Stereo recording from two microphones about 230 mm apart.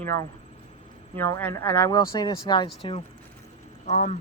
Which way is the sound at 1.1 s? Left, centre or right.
Centre.